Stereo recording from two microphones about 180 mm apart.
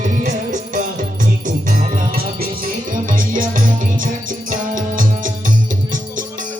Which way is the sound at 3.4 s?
50° right (ahead or behind).